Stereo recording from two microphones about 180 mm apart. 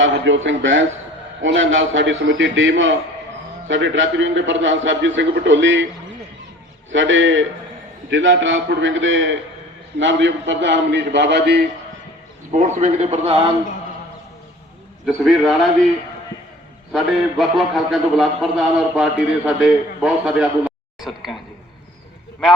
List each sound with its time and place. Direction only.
0.0 s a man's voice: 90° right
6.9 s a man's voice: 90° right; by 11.6 s 70° right (ahead or behind)
12.5 s a man's voice: 40° right (ahead or behind)
15.0 s a man's voice: centre (ahead or behind)
16.9 s a man's voice: centre (ahead or behind)